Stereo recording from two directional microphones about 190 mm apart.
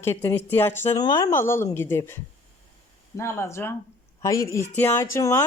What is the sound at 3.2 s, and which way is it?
Speech, 15° left (ahead or behind).